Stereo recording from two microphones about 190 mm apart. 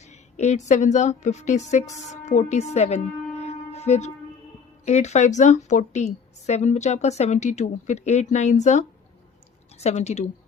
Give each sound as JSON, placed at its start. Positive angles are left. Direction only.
{"t": 0.0, "sound": "a woman's voice", "side_deg": 35}